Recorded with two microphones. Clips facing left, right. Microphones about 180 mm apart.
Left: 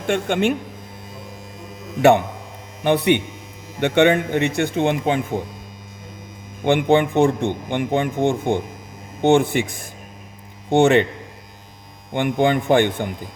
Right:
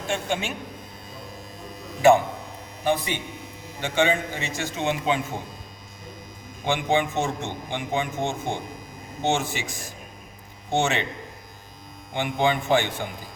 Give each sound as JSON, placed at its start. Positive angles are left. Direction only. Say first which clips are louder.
{"t": 0.1, "sound": "speech", "louder": "left 9 dB", "side_deg": 60}
{"t": 2.0, "sound": "speech", "louder": "left 3 dB", "side_deg": 65}
{"t": 6.7, "sound": "speech", "louder": "left 7 dB", "side_deg": 60}
{"t": 12.1, "sound": "speech", "louder": "left 6 dB", "side_deg": 55}